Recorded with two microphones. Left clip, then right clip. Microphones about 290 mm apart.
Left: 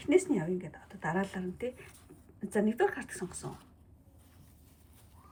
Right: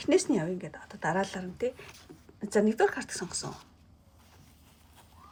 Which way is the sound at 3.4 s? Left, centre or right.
Right.